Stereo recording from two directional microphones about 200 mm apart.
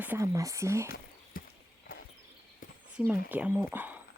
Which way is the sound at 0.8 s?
50° left (ahead or behind).